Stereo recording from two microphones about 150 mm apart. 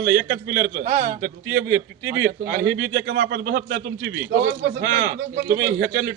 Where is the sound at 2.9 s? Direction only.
90° right.